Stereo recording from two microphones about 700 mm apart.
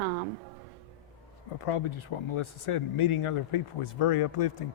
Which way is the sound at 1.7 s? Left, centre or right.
Left.